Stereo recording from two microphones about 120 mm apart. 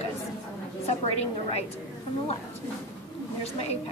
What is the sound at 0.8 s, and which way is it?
Speech, 55° left (ahead or behind).